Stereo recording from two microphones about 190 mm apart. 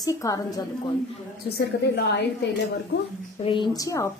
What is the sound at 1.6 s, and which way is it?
Speech, 60° left (ahead or behind).